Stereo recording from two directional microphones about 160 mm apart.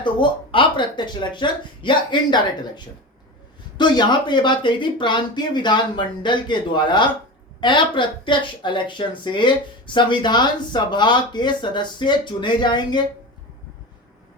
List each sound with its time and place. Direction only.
0.0 s a woman's voice: 30° left (ahead or behind)